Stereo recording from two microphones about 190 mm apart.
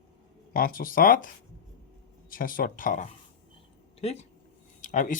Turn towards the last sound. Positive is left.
turn(degrees=45)  # may be behind; listen again after turning